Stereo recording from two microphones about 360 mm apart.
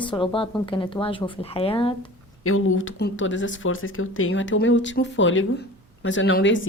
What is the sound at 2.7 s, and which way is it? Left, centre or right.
Speech, left.